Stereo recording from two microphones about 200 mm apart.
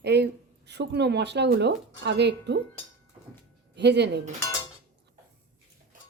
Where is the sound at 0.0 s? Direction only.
55° right (ahead or behind).